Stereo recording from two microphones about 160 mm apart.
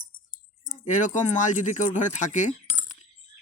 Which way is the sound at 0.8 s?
50° left (ahead or behind).